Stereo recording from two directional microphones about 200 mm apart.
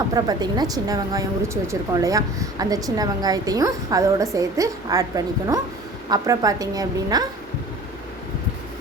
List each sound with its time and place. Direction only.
0.1 s a woman's voice: 20° right (ahead or behind)